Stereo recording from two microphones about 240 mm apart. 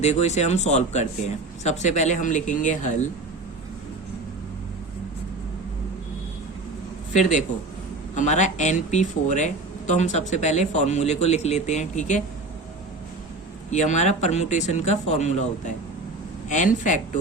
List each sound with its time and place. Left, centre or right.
0.0 s speech: left
7.1 s speech: left
13.7 s speech: left